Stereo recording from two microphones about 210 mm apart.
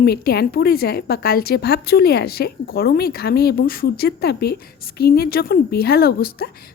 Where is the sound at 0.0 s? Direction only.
50° left (ahead or behind).